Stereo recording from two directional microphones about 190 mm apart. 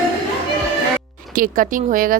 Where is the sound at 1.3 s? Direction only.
45° right (ahead or behind).